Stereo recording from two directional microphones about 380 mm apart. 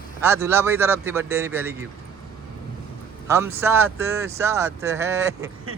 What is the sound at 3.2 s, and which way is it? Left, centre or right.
A man's voice, centre.